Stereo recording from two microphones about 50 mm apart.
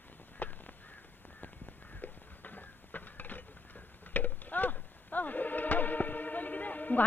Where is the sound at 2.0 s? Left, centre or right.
Left.